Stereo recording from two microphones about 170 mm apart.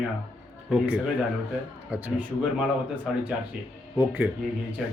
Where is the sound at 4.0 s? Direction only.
10° right (ahead or behind).